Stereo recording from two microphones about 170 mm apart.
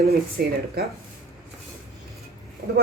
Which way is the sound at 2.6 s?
50° right (ahead or behind).